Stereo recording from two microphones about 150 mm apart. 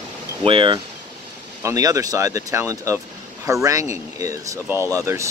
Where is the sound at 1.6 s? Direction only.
20° right (ahead or behind).